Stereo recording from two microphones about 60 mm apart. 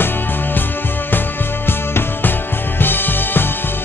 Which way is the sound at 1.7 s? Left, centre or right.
Left.